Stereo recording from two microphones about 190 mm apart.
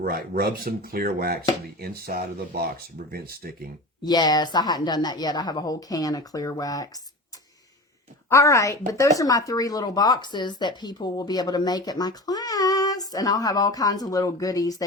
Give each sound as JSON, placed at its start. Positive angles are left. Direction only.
{"t": 0.0, "sound": "speech", "side_deg": -50}
{"t": 4.0, "sound": "speech", "side_deg": 20}
{"t": 8.3, "sound": "a woman's voice", "side_deg": 15}